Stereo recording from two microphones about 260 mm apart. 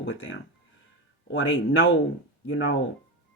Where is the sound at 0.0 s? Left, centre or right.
Left.